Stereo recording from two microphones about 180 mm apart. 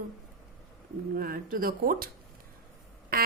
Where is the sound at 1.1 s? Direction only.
50° right (ahead or behind).